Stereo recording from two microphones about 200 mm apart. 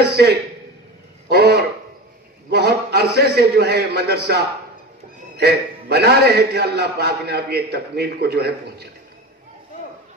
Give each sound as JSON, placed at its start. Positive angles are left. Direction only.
{"t": 0.0, "sound": "a man's voice", "side_deg": -55}
{"t": 5.4, "sound": "a man's voice", "side_deg": -55}